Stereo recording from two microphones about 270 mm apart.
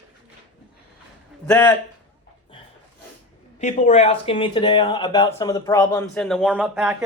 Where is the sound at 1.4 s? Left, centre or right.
Centre.